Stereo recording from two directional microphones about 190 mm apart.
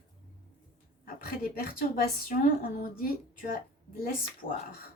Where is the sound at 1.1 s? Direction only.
50° left (ahead or behind).